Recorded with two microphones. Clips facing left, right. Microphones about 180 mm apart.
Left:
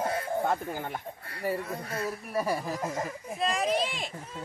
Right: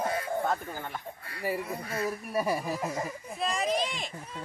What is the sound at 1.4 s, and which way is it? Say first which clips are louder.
A child's voice: left 1 dB; 10° right (ahead or behind).